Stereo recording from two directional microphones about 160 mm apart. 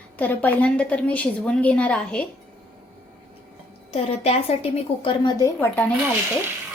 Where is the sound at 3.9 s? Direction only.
40° left (ahead or behind); by 5.5 s 25° left (ahead or behind).